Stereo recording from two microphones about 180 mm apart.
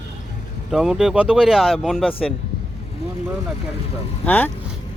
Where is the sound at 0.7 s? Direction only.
5° right (ahead or behind).